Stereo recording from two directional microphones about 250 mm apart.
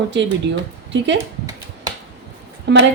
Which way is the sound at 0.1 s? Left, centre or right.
Right.